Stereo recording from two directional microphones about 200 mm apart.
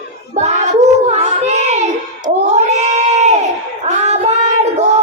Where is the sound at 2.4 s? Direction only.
35° right (ahead or behind).